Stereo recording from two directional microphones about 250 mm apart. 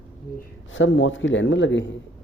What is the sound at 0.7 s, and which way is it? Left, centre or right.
Speech, left.